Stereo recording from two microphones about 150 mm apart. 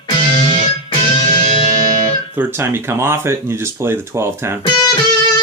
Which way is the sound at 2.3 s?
15° right (ahead or behind).